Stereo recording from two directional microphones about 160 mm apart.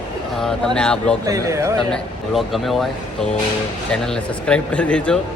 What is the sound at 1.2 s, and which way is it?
Speech, 20° right (ahead or behind).